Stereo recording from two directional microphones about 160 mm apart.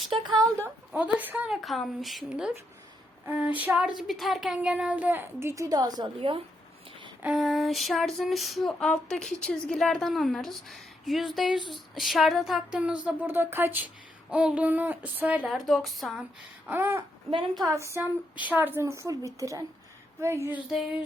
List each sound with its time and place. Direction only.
0.3 s a woman's voice: 25° right (ahead or behind)
0.9 s female singing: 10° right (ahead or behind)
3.6 s speech: 5° right (ahead or behind); by 6.1 s 25° right (ahead or behind)
6.1 s speech: 35° right (ahead or behind)
7.2 s female singing: 5° right (ahead or behind)
14.3 s speech: 5° right (ahead or behind)
16.6 s a sound: 10° right (ahead or behind)
18.0 s a woman's voice: 15° right (ahead or behind)
20.7 s female singing: 5° right (ahead or behind)